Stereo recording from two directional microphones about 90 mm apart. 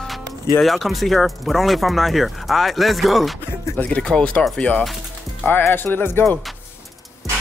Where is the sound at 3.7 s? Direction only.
15° left (ahead or behind).